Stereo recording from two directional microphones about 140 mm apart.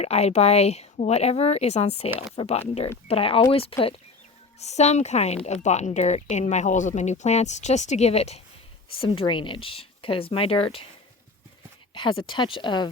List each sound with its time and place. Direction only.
0.0 s speech: 50° left (ahead or behind)
4.6 s speech: 50° left (ahead or behind)
9.0 s speech: 40° left (ahead or behind)
11.9 s speech: 35° left (ahead or behind)